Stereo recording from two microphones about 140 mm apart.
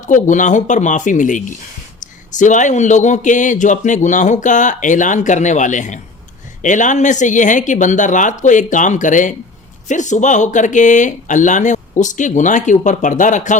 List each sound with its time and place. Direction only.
0.0 s speech: 65° left (ahead or behind)